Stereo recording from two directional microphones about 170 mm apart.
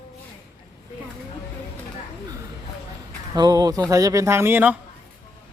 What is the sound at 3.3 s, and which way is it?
A man's voice, 20° right (ahead or behind).